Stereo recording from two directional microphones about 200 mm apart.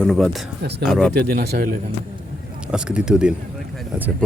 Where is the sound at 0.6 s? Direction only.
55° right (ahead or behind).